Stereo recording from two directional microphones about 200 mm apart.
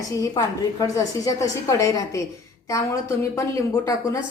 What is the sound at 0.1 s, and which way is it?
A woman's voice, 15° left (ahead or behind).